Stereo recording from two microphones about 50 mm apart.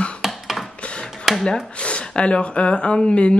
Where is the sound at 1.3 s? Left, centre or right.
Centre.